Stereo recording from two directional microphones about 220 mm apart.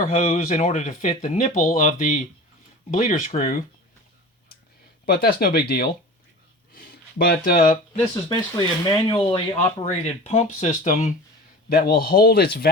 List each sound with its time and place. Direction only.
0.0 s speech: 35° left (ahead or behind)
5.0 s speech: 45° left (ahead or behind)
8.1 s speech: 20° left (ahead or behind)
11.7 s speech: 45° left (ahead or behind)